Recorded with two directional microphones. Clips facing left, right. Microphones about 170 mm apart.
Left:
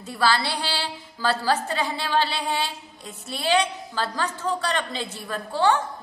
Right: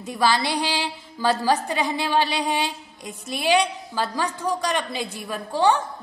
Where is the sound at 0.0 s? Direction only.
15° right (ahead or behind).